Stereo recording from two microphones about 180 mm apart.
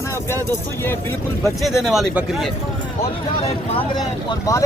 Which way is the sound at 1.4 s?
Centre (ahead or behind).